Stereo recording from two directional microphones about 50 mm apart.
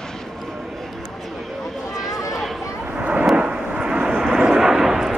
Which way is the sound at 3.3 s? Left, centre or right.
Right.